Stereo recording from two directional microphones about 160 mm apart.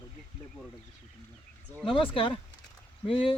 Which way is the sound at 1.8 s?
35° left (ahead or behind).